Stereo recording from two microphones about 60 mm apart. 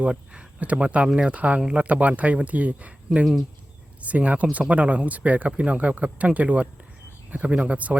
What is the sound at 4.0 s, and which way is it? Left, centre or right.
Speech, right.